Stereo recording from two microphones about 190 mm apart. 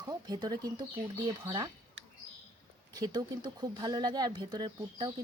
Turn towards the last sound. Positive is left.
turn(degrees=-20)  # may be behind; listen again after turning